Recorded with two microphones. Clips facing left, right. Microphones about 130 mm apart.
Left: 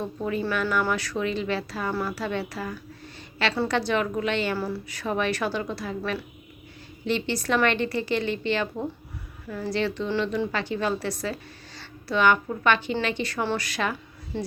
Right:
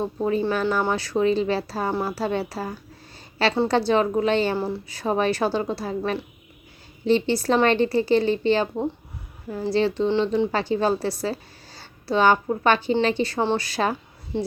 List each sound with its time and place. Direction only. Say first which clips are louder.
0.0 s a woman's voice: right 5 dB; 30° right (ahead or behind)
14.3 s a woman's voice: right 5 dB; 20° right (ahead or behind)